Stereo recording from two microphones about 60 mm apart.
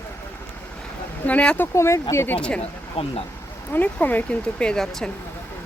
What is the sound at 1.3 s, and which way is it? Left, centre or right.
Speech, centre.